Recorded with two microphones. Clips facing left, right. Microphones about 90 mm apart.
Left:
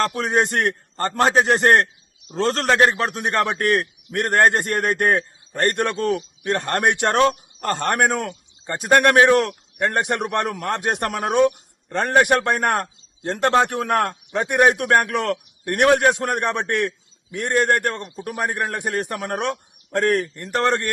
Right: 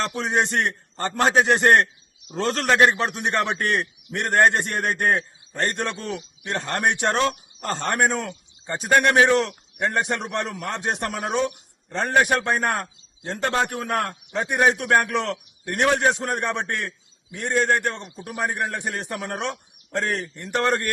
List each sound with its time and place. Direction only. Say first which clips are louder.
0.2 s a man's voice: left 2 dB; 50° left (ahead or behind)
1.1 s a man's voice: left 1 dB; centre (ahead or behind)
1.6 s a man's voice: left 1 dB; 40° left (ahead or behind); by 20.2 s 55° left (ahead or behind)
20.3 s a man's voice: left 2 dB; 40° left (ahead or behind)